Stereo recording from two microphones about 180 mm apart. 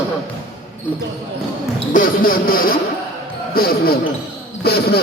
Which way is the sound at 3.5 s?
55° left (ahead or behind).